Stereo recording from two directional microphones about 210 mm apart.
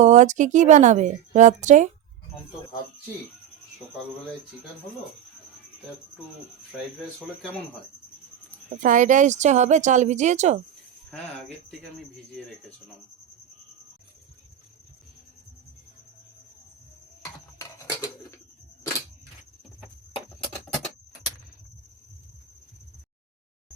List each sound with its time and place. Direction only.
0.0 s speech: 35° right (ahead or behind)
8.8 s speech: 35° right (ahead or behind)
11.1 s speech: 5° left (ahead or behind)
17.6 s a sound: 15° left (ahead or behind)